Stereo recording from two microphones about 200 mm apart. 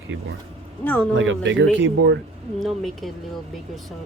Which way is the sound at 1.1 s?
70° right (ahead or behind).